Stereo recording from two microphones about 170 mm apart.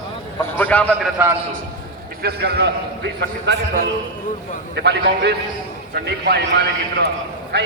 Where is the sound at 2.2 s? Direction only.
70° right (ahead or behind).